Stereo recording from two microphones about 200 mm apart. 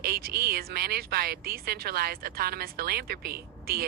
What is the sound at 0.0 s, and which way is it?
Speech, 50° right (ahead or behind).